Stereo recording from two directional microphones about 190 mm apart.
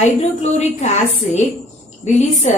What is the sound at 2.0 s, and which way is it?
Speech, 40° left (ahead or behind).